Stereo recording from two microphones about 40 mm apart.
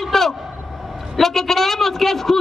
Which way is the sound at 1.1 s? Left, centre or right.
Centre.